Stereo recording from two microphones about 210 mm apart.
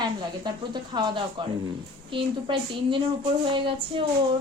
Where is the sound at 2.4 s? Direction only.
25° right (ahead or behind).